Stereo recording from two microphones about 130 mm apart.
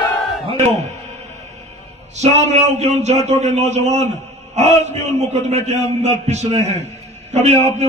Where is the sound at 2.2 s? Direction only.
60° right (ahead or behind).